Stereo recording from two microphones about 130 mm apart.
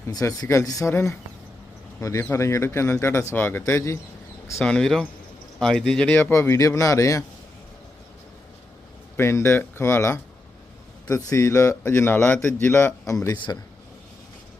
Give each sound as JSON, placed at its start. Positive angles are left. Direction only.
{"t": 0.1, "sound": "speech", "side_deg": 30}
{"t": 4.6, "sound": "speech", "side_deg": 5}
{"t": 6.3, "sound": "speech", "side_deg": 20}
{"t": 9.1, "sound": "speech", "side_deg": 20}
{"t": 11.3, "sound": "speech", "side_deg": 25}